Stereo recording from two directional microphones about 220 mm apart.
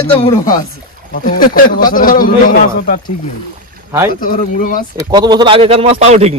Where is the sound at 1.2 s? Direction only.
40° left (ahead or behind).